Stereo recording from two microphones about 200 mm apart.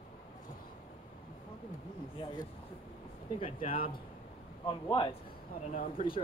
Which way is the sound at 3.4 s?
25° left (ahead or behind).